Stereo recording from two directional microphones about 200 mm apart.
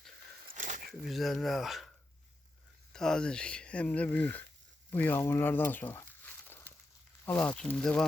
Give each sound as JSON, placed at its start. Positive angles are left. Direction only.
{"t": 0.5, "sound": "crumpling", "side_deg": -40}
{"t": 0.9, "sound": "speech", "side_deg": 0}
{"t": 2.9, "sound": "speech", "side_deg": 5}